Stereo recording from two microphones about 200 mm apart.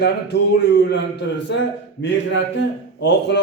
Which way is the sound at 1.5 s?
60° left (ahead or behind).